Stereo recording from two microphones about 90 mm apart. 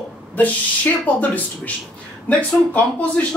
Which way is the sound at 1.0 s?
15° left (ahead or behind).